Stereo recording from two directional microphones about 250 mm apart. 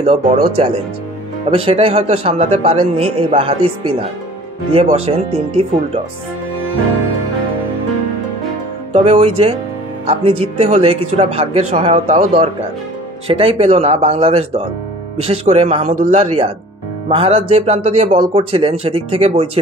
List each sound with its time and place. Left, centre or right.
0.0 s speech: right
8.9 s speech: right